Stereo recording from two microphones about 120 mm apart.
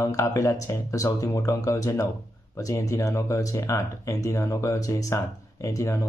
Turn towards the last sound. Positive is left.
turn(degrees=25)  # may be behind; listen again after turning